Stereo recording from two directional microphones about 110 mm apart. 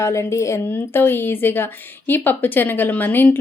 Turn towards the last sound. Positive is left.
turn(degrees=15)  # may be behind; listen again after turning